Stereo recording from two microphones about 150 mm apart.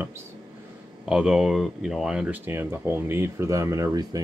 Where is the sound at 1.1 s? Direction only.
5° right (ahead or behind); by 4.2 s 25° right (ahead or behind).